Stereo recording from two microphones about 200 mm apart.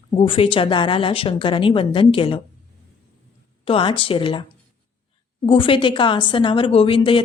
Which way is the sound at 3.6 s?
25° left (ahead or behind).